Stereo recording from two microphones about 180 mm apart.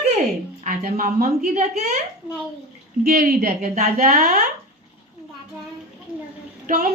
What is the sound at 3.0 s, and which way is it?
Speech, 55° right (ahead or behind).